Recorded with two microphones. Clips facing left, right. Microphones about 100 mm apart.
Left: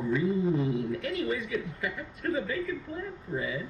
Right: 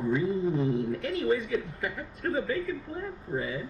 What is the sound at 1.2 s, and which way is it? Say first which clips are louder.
A man's voice: right 4 dB; 40° right (ahead or behind).